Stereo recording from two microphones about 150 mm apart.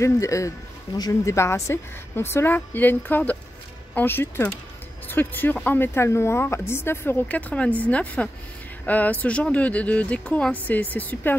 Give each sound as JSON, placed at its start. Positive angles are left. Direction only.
{"t": 0.0, "sound": "speech", "side_deg": 20}